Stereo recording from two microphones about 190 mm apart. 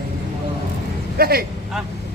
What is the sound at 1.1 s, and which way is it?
Speech, 50° right (ahead or behind).